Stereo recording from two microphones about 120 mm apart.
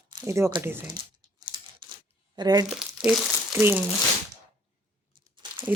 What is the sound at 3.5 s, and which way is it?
Speech, 20° right (ahead or behind).